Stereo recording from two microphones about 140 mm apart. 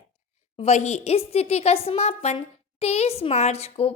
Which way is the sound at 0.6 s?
55° left (ahead or behind).